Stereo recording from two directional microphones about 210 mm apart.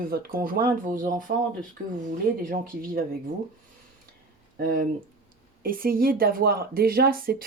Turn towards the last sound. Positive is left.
turn(degrees=-45)  # may be behind; listen again after turning